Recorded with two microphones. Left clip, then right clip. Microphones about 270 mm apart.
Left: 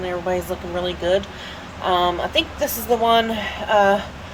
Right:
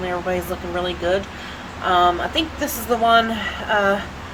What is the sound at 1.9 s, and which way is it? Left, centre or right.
Speech, centre.